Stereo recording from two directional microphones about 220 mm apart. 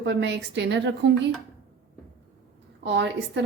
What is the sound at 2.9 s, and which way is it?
Speech, 55° right (ahead or behind).